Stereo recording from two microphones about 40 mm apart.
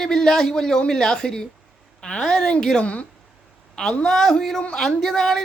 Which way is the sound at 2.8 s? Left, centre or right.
Left.